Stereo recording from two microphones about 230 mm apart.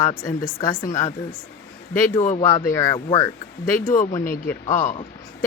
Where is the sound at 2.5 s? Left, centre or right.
Centre.